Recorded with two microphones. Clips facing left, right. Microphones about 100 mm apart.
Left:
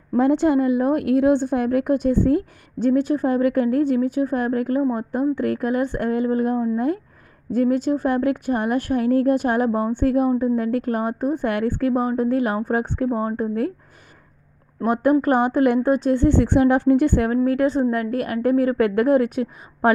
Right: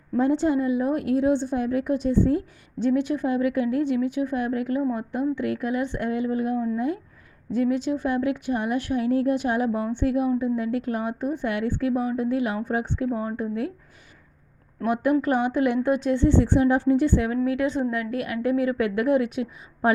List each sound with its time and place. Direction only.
0.2 s a woman's voice: 65° left (ahead or behind); by 13.7 s 45° left (ahead or behind)
14.8 s a woman's voice: 45° left (ahead or behind)